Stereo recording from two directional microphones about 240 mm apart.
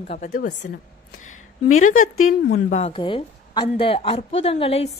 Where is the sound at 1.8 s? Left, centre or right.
Left.